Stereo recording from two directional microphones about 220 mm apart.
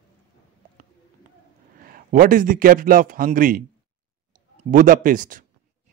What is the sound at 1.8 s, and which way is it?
A man's voice, 40° right (ahead or behind).